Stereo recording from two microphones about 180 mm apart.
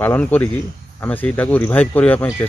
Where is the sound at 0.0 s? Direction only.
10° left (ahead or behind).